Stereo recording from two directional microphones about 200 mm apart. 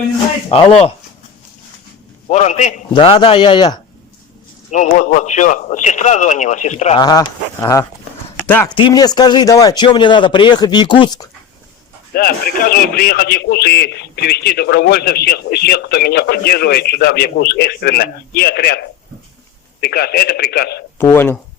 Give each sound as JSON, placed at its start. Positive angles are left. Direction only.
{"t": 0.5, "sound": "speech", "side_deg": 30}
{"t": 2.2, "sound": "speech", "side_deg": 35}
{"t": 2.9, "sound": "speech", "side_deg": 25}
{"t": 4.7, "sound": "speech", "side_deg": 35}
{"t": 7.0, "sound": "speech", "side_deg": 20}
{"t": 8.7, "sound": "speech", "side_deg": 20}
{"t": 12.1, "sound": "a man's voice", "side_deg": 45}
{"t": 21.0, "sound": "speech", "side_deg": 10}